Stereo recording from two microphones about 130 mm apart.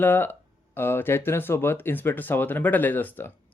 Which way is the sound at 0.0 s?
15° left (ahead or behind).